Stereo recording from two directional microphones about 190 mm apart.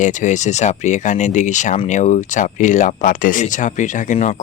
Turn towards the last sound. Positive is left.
turn(degrees=40)  # may be behind; listen again after turning